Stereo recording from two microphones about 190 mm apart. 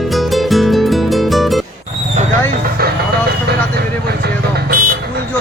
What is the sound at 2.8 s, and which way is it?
Vehicle, 50° right (ahead or behind).